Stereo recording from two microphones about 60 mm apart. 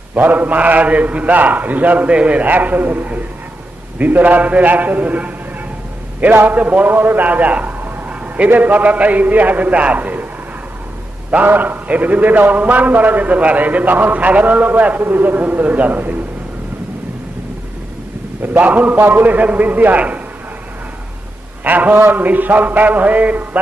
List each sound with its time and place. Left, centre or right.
0.1 s a man's voice: right
11.3 s a man's voice: right
18.4 s a man's voice: right
21.6 s a man's voice: right